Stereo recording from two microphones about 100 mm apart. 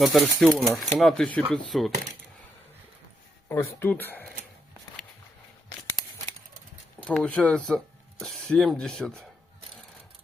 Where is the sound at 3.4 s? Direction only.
20° left (ahead or behind).